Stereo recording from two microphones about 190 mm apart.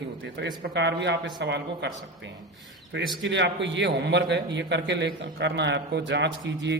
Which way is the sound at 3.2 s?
70° right (ahead or behind).